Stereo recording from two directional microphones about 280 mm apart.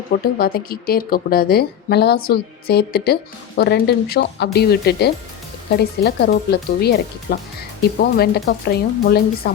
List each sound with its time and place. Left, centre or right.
0.1 s a woman's voice: left